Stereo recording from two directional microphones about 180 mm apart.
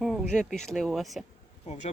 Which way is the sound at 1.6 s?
35° left (ahead or behind).